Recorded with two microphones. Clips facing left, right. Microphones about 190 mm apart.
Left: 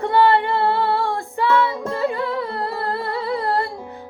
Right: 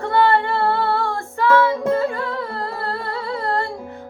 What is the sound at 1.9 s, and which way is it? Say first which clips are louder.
Humming: even; 20° left (ahead or behind).